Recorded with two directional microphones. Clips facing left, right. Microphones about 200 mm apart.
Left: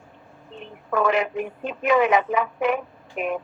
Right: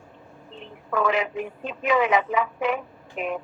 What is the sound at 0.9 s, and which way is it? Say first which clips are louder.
A woman's voice: left 2 dB; 55° left (ahead or behind).